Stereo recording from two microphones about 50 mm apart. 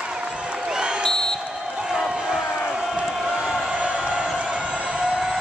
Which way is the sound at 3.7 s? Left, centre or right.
Right.